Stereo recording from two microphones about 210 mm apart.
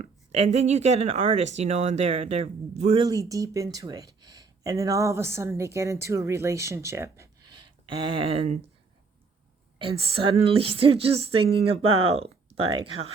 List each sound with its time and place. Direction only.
0.0 s speech: 30° right (ahead or behind)
3.1 s speech: 15° right (ahead or behind)
9.7 s a woman's voice: 25° right (ahead or behind)
11.9 s speech: 90° right
12.2 s a sound: 30° right (ahead or behind)
12.7 s a woman's voice: 25° right (ahead or behind)